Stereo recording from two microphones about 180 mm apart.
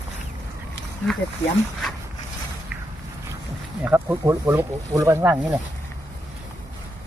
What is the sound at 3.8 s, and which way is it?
Speech, 10° right (ahead or behind).